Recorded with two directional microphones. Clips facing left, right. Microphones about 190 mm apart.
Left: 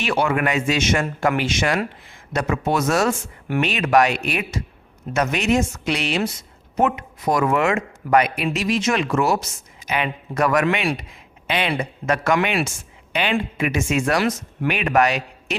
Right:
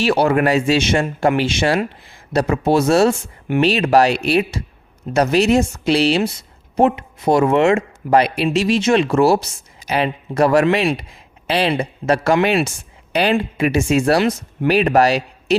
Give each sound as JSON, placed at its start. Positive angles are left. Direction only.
{"t": 0.0, "sound": "speech", "side_deg": -35}